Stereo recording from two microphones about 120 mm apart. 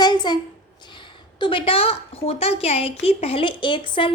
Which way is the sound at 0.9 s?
40° left (ahead or behind).